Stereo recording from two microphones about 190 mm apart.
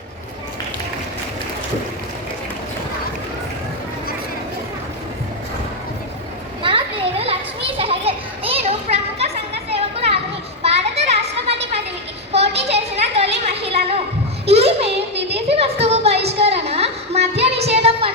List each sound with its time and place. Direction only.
6.6 s children playing: 25° right (ahead or behind)
12.3 s a sound: 30° right (ahead or behind)
17.4 s music: 30° right (ahead or behind)